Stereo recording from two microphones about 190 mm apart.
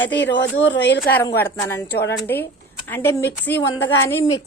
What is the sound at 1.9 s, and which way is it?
Speech, 60° left (ahead or behind).